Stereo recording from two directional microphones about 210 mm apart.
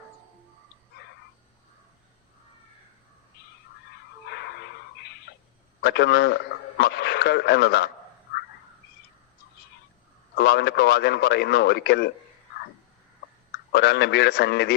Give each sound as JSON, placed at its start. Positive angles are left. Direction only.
{"t": 1.0, "sound": "dog", "side_deg": 55}
{"t": 4.3, "sound": "a sound", "side_deg": 50}
{"t": 5.8, "sound": "a man's voice", "side_deg": 50}
{"t": 10.3, "sound": "a man's voice", "side_deg": 50}
{"t": 13.7, "sound": "a man's voice", "side_deg": 50}